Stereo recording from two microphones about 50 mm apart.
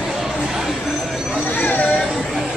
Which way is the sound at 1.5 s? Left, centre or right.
Left.